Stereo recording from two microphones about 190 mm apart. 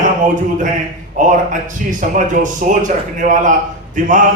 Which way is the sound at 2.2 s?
40° right (ahead or behind).